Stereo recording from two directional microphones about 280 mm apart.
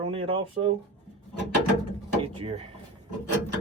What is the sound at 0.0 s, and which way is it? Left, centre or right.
Speech, centre.